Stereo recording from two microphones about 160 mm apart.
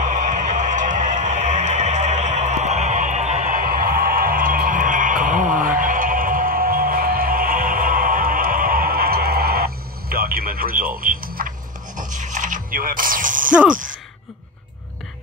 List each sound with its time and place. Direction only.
0.0 s a sound: 50° right (ahead or behind)
5.8 s music: 60° right (ahead or behind)
12.0 s music: 50° right (ahead or behind)